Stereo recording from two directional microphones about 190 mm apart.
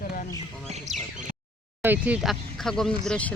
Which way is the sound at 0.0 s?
50° left (ahead or behind).